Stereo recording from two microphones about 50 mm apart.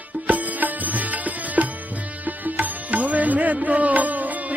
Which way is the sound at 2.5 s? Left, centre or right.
Right.